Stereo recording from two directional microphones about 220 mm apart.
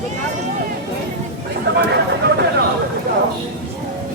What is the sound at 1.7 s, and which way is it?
Speech, 50° right (ahead or behind).